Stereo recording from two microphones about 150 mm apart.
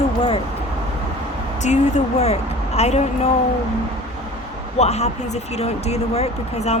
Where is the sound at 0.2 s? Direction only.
35° left (ahead or behind).